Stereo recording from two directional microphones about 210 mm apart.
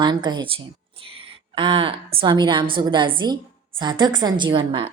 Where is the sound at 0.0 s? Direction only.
20° right (ahead or behind).